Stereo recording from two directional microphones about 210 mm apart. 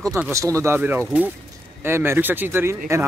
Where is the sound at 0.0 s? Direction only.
15° right (ahead or behind).